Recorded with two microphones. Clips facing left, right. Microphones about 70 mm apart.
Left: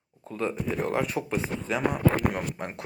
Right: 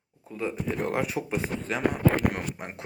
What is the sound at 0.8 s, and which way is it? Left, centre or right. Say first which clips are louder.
Speech: left 1 dB; centre.